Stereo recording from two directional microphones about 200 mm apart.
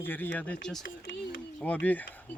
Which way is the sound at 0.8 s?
65° left (ahead or behind).